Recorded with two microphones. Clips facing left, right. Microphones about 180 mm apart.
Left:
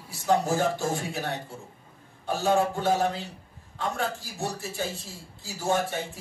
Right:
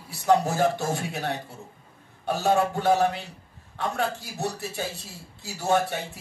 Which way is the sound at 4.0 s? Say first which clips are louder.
Right 2 dB; 65° right (ahead or behind).